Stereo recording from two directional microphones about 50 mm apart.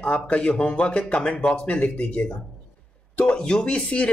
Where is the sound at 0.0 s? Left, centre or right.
Left.